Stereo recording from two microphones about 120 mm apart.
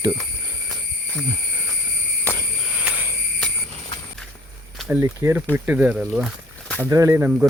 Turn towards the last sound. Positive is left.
turn(degrees=-15)  # may be behind; listen again after turning